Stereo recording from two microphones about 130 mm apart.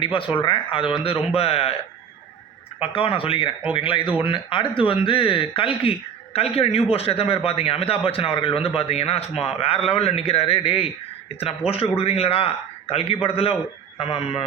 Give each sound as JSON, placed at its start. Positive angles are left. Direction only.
{"t": 0.0, "sound": "a man's voice", "side_deg": 40}
{"t": 2.8, "sound": "a man's voice", "side_deg": 45}